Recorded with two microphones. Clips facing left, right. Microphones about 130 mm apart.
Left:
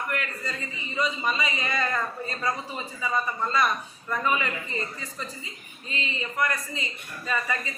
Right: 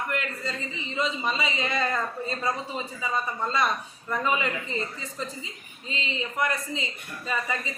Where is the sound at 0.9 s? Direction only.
25° right (ahead or behind).